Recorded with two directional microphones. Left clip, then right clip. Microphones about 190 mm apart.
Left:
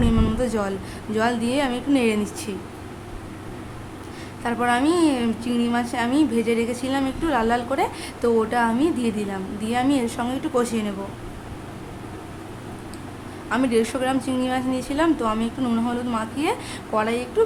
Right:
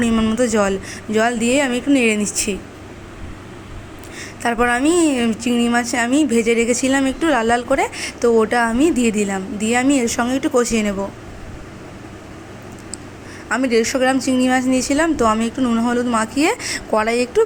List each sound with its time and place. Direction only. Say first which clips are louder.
0.1 s a sound: right 5 dB; 15° right (ahead or behind)
0.3 s a woman's voice: right 7 dB; 25° right (ahead or behind)
4.4 s a woman's voice: right 4 dB; 30° right (ahead or behind)
13.7 s a woman's voice: right 7 dB; 25° right (ahead or behind)
16.1 s a woman's voice: right 7 dB; 25° right (ahead or behind)